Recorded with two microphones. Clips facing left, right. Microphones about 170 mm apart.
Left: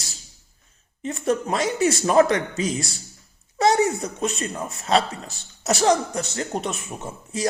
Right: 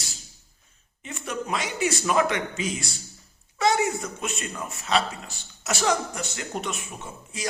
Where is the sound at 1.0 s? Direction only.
30° left (ahead or behind).